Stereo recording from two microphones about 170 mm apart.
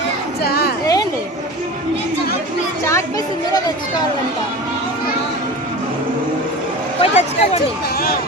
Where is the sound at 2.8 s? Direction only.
15° left (ahead or behind).